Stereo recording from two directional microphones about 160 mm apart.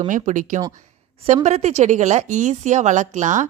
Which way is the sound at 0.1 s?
50° right (ahead or behind).